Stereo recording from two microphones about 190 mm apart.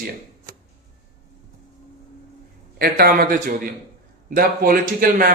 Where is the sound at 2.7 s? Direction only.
55° right (ahead or behind).